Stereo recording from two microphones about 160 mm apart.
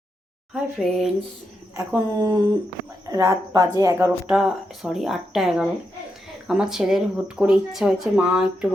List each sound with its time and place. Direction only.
0.5 s speech: centre (ahead or behind)
1.7 s speech: 20° right (ahead or behind)
4.3 s speech: 5° right (ahead or behind)